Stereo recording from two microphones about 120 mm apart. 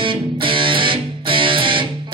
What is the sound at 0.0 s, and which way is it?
Music, 45° right (ahead or behind).